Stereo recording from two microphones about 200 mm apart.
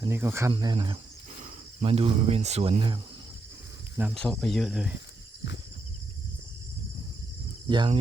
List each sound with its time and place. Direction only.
0.0 s speech: 10° right (ahead or behind)
0.5 s speech: 20° right (ahead or behind)
4.1 s speech: 5° left (ahead or behind)
7.7 s speech: 25° right (ahead or behind)